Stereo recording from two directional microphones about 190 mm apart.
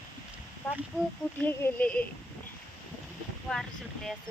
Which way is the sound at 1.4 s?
10° left (ahead or behind).